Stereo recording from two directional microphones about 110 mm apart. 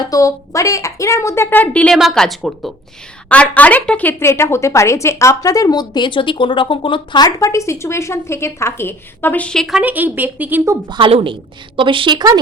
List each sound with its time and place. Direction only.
0.0 s speech: 30° left (ahead or behind); by 2.7 s centre (ahead or behind)
3.2 s a woman's voice: 10° left (ahead or behind)
4.2 s speech: 25° left (ahead or behind); by 9.8 s centre (ahead or behind)
9.8 s a woman's voice: 15° right (ahead or behind)
10.8 s a woman's voice: 45° right (ahead or behind)